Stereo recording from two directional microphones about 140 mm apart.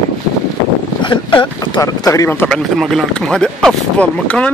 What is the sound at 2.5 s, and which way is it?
Speech, 5° left (ahead or behind).